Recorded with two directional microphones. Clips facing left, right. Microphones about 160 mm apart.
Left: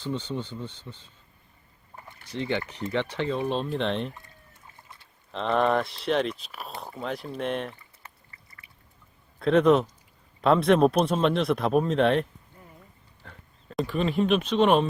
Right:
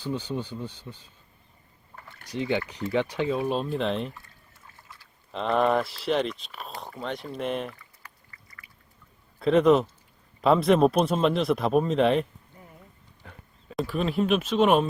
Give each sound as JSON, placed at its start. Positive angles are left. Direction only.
{"t": 0.0, "sound": "speech", "side_deg": -10}
{"t": 2.2, "sound": "speech", "side_deg": -10}
{"t": 4.8, "sound": "pour", "side_deg": 20}
{"t": 5.3, "sound": "speech", "side_deg": 0}
{"t": 7.7, "sound": "pour", "side_deg": 25}
{"t": 9.4, "sound": "speech", "side_deg": 0}
{"t": 13.2, "sound": "speech", "side_deg": -5}